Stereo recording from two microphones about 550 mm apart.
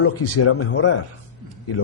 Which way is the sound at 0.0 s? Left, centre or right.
Left.